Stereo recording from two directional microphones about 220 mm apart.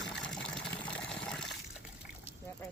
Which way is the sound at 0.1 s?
5° left (ahead or behind).